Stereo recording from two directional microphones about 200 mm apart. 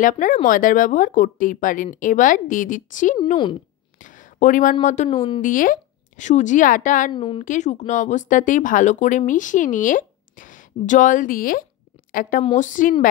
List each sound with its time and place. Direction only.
0.0 s speech: 40° left (ahead or behind)
4.0 s a sound: 40° left (ahead or behind)
4.8 s speech: 35° left (ahead or behind)
5.1 s a woman's voice: 25° left (ahead or behind)
5.4 s a woman's voice: 40° left (ahead or behind)
7.1 s a woman's voice: 25° left (ahead or behind)
7.4 s a woman's voice: 35° left (ahead or behind)